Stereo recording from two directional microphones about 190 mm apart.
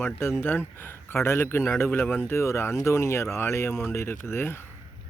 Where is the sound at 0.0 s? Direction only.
15° left (ahead or behind).